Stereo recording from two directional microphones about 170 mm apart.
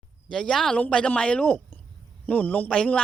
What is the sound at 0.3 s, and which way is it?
Speech, 5° left (ahead or behind).